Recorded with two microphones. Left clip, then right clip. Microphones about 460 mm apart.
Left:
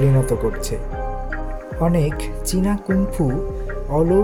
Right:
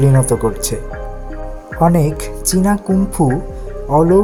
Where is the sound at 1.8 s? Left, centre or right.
Left.